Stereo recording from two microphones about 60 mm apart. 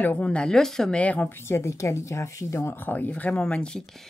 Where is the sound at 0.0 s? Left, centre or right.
Left; by 0.9 s centre.